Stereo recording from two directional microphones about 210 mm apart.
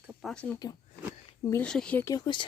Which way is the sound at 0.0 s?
5° right (ahead or behind).